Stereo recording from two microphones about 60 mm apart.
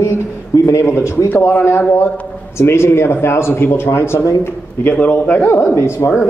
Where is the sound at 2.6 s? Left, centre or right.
Left.